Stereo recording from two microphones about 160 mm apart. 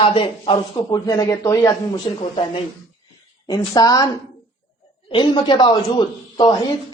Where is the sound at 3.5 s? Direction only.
25° left (ahead or behind).